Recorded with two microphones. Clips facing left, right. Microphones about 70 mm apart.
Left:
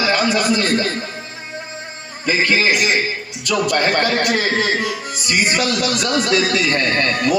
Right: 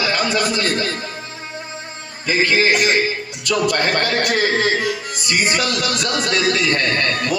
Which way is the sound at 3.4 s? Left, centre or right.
Left.